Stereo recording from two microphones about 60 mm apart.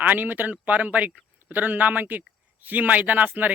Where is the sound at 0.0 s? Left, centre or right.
Right.